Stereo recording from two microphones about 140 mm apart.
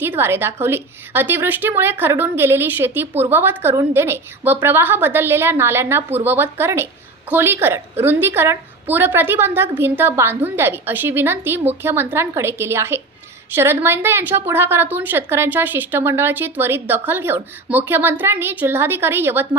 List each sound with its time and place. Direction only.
0.0 s a woman's voice: 15° right (ahead or behind)